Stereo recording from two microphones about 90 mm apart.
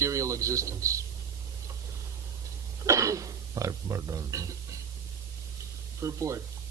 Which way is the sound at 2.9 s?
35° right (ahead or behind).